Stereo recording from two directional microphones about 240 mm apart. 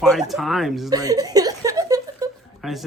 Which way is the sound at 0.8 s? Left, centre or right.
Centre.